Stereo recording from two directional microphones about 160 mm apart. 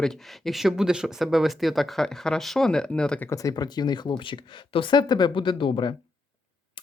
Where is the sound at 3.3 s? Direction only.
20° left (ahead or behind).